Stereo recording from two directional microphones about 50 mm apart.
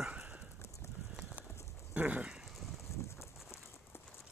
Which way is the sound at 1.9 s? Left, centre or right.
Right.